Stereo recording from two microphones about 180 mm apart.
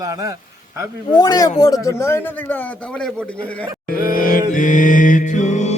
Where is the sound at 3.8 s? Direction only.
50° left (ahead or behind).